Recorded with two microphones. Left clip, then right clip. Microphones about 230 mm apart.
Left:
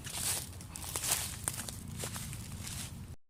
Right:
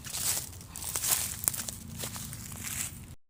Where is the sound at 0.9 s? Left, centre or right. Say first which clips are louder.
Right 3 dB; centre.